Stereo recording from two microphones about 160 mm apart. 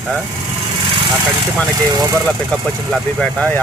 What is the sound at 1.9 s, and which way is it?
Speech, 20° right (ahead or behind).